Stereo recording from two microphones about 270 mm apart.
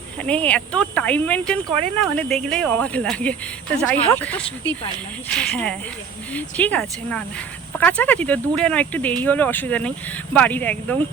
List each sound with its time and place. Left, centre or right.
0.3 s speech: centre